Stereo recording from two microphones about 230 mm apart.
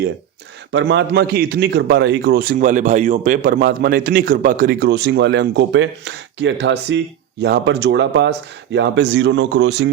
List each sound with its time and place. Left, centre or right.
0.7 s a man's voice: right